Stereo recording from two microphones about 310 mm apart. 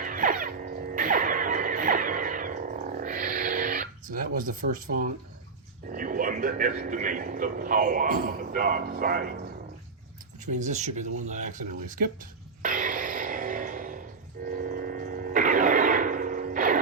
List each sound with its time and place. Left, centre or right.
0.0 s music: right
4.4 s a man's voice: right
11.3 s throat clearing: right